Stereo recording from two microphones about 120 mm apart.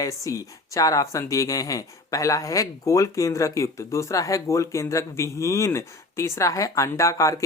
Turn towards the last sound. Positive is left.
turn(degrees=25)  # may be behind; listen again after turning